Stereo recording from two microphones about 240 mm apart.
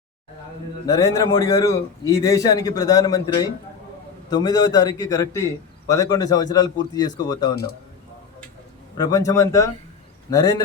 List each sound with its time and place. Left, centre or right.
0.9 s a man's voice: centre
7.5 s a man's voice: left
9.0 s a man's voice: centre